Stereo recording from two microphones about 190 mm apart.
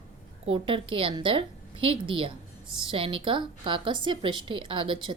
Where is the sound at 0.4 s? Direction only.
30° right (ahead or behind).